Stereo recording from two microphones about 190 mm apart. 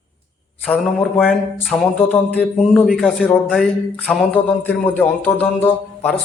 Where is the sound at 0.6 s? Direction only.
5° left (ahead or behind).